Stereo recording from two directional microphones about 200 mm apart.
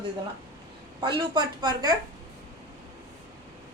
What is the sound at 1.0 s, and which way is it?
Speech, 20° right (ahead or behind).